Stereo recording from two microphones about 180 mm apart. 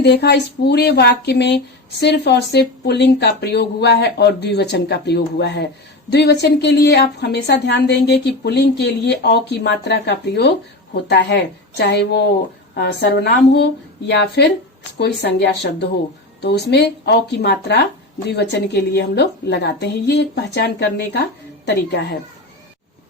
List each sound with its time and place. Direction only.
0.0 s speech: 70° left (ahead or behind)